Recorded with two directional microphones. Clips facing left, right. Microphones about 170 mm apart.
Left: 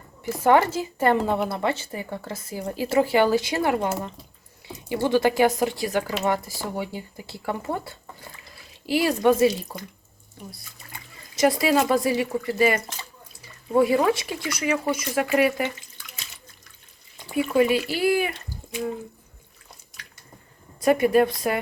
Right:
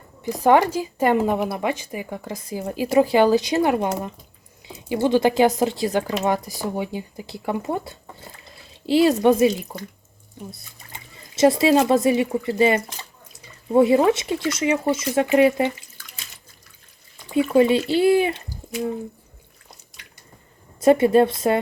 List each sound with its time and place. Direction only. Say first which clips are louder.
0.2 s speech: right 2 dB; 15° right (ahead or behind)
17.5 s speech: right 4 dB; 25° right (ahead or behind)
20.7 s speech: right 4 dB; 25° right (ahead or behind)